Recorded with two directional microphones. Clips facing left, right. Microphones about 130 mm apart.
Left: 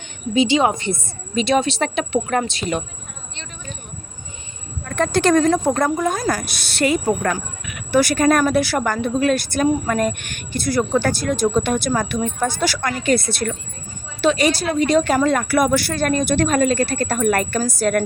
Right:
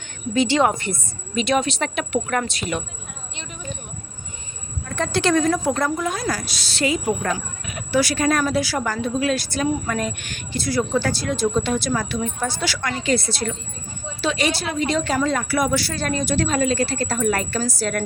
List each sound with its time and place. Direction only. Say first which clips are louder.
0.3 s a woman's voice: left 2 dB; 15° left (ahead or behind)
1.4 s speech: left 3 dB; 30° left (ahead or behind)
4.9 s speech: left 4 dB; 50° left (ahead or behind)
7.6 s speech: right 2 dB; 30° right (ahead or behind)
7.9 s speech: left 4 dB; 50° left (ahead or behind)